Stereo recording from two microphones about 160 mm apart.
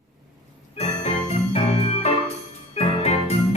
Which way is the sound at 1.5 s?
45° left (ahead or behind).